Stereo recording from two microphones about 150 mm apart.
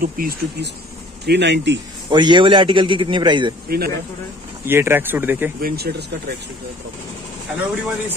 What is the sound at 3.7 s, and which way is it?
Speech, 90° right.